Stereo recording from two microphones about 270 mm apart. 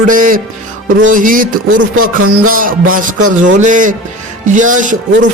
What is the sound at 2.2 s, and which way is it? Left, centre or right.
Speech, right.